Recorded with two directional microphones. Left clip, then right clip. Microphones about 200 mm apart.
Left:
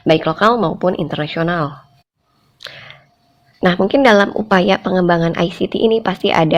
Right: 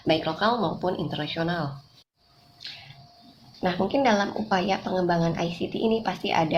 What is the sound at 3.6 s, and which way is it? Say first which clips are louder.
Speech: left 11 dB; 45° left (ahead or behind).